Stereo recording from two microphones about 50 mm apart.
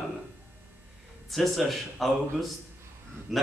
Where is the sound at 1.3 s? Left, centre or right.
Centre.